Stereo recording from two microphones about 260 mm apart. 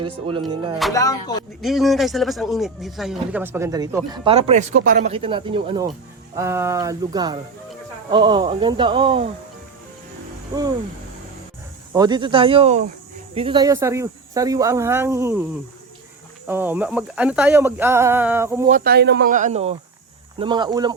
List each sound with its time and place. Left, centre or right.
0.0 s speech: centre
0.9 s speech: centre
1.6 s speech: centre
10.5 s speech: centre
11.9 s speech: centre
16.5 s speech: centre
18.7 s speech: right; by 20.9 s centre